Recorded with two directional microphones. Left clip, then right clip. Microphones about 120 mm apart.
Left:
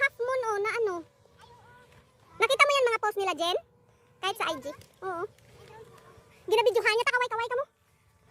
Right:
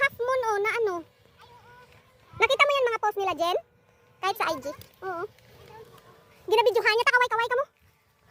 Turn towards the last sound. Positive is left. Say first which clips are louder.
# right 5 dB
turn(degrees=-20)  # may be behind; listen again after turning